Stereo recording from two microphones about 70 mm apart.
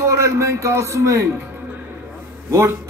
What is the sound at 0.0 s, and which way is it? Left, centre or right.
A man's voice, right.